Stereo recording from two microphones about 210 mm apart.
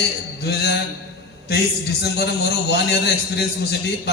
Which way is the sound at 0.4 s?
50° left (ahead or behind).